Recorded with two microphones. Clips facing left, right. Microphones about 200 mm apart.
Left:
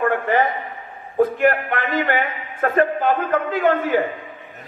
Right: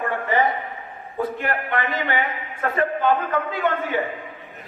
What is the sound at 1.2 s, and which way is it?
A man's voice, 50° left (ahead or behind).